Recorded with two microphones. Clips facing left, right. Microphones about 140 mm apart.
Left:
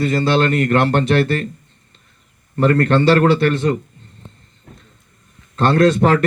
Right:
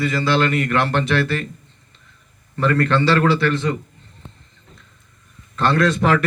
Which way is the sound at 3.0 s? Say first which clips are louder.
Left 5 dB; 30° left (ahead or behind).